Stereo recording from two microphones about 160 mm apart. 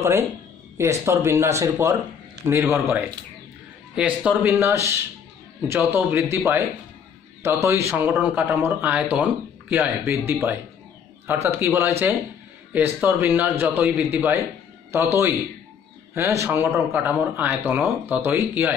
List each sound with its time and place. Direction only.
0.7 s a man's voice: 15° right (ahead or behind)
16.2 s a man's voice: 15° right (ahead or behind)